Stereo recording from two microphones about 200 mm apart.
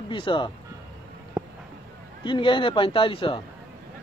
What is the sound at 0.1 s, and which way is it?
Speech, 25° left (ahead or behind).